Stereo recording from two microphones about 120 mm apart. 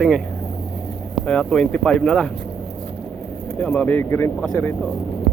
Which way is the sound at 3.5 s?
10° left (ahead or behind).